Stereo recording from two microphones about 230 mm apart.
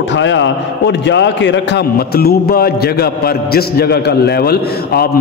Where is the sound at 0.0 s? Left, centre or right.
Left.